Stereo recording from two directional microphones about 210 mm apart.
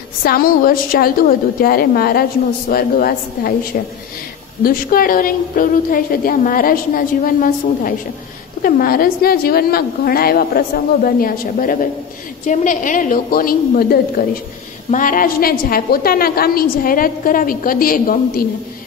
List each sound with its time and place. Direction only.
0.2 s a woman's voice: 45° left (ahead or behind)